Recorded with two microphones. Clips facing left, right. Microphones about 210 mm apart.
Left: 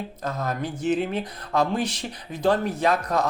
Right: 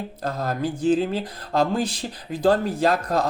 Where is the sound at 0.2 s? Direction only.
35° right (ahead or behind).